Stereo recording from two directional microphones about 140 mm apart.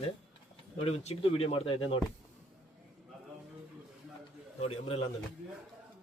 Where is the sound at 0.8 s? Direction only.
45° left (ahead or behind).